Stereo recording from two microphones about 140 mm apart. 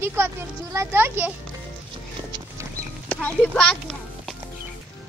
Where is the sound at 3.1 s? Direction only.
10° left (ahead or behind).